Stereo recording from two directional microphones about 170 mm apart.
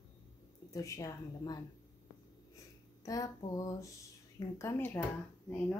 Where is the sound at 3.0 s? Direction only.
20° left (ahead or behind).